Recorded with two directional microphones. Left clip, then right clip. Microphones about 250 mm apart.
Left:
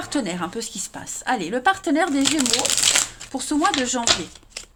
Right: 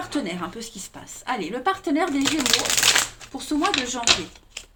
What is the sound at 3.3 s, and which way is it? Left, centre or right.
Speech, left.